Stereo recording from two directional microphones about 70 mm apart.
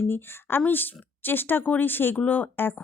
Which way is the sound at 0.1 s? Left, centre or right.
Left.